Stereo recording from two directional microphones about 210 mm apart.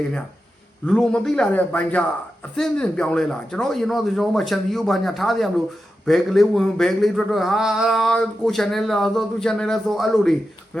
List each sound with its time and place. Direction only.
0.9 s a man's voice: 5° left (ahead or behind)